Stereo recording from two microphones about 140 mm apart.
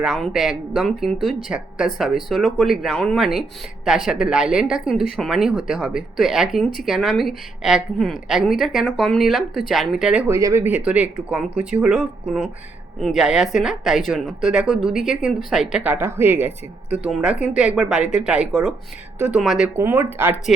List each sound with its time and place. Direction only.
0.0 s speech: centre (ahead or behind)
10.2 s a woman's voice: 20° right (ahead or behind); by 19.7 s centre (ahead or behind)
19.7 s a woman's voice: 15° right (ahead or behind)